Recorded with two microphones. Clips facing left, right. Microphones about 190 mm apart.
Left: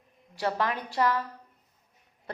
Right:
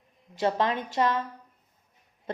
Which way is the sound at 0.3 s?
20° right (ahead or behind).